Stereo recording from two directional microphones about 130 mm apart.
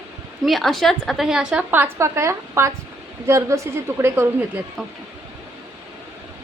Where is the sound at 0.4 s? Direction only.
Centre (ahead or behind); by 4.6 s 15° right (ahead or behind).